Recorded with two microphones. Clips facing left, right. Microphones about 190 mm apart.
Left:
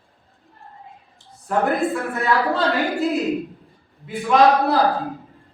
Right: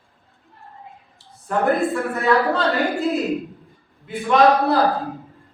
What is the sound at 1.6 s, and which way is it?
A woman's voice, centre (ahead or behind).